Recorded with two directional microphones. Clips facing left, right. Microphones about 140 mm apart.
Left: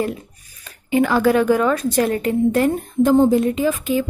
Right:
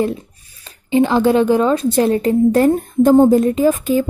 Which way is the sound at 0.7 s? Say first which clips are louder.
Right 3 dB; 25° right (ahead or behind).